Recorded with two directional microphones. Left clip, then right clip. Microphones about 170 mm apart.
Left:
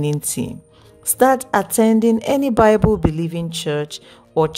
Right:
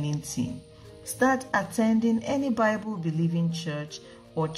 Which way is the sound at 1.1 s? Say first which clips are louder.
Left 10 dB; 75° left (ahead or behind).